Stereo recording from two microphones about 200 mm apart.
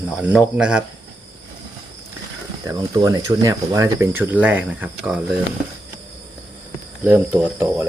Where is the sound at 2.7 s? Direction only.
15° right (ahead or behind).